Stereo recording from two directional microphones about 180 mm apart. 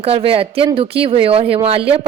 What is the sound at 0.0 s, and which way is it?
Speech, 30° right (ahead or behind).